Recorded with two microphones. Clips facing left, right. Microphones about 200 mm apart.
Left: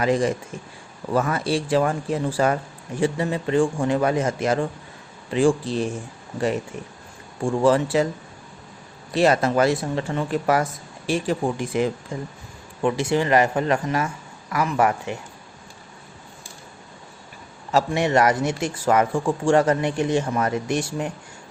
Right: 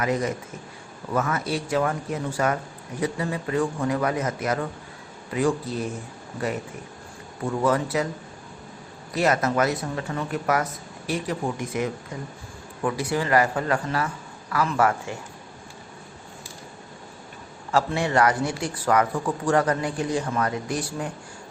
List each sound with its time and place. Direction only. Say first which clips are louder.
0.0 s a man's voice: left 4 dB; 30° left (ahead or behind)
5.6 s speech: left 4 dB; 80° left
7.4 s speech: left 4 dB; 30° left (ahead or behind)
9.1 s speech: left 4 dB; 30° left (ahead or behind)
17.7 s speech: left 3 dB; 20° left (ahead or behind)